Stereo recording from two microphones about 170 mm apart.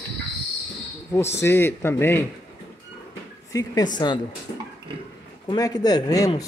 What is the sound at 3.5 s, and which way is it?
Speech, 20° left (ahead or behind).